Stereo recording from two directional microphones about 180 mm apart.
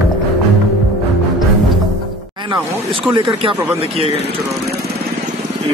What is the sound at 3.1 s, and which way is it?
Speech, 30° right (ahead or behind).